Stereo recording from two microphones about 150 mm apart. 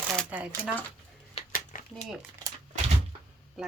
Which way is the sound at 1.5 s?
60° left (ahead or behind).